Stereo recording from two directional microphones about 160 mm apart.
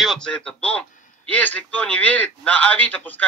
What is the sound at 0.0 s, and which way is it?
A man's voice, 5° left (ahead or behind).